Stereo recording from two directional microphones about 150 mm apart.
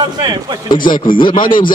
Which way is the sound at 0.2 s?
30° right (ahead or behind).